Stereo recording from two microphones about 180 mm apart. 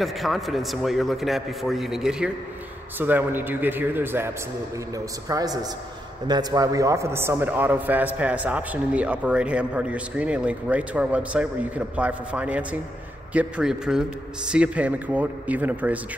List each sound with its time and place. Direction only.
0.0 s a man's voice: centre (ahead or behind)